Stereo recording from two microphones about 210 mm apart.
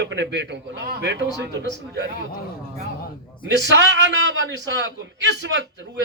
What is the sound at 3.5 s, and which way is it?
A man's voice, 60° right (ahead or behind).